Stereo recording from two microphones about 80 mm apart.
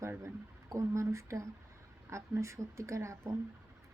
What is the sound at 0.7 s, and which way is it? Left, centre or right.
Speech, right.